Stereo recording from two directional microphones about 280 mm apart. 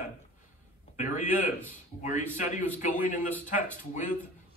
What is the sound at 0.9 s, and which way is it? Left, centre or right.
Speech, left.